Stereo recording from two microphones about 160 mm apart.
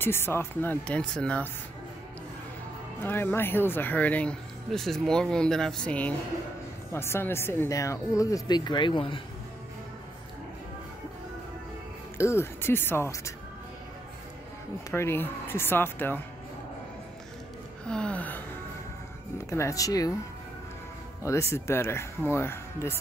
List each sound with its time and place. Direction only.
0.0 s speech: 15° left (ahead or behind)
3.0 s speech: 15° left (ahead or behind); by 9.2 s 30° left (ahead or behind)
12.2 s speech: 15° left (ahead or behind)
14.9 s speech: 15° left (ahead or behind)
17.8 s speech: 5° left (ahead or behind)
19.5 s speech: 20° left (ahead or behind)
21.2 s speech: 20° left (ahead or behind)